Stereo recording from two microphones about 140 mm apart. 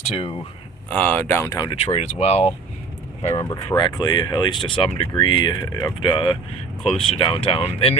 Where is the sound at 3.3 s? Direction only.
25° left (ahead or behind).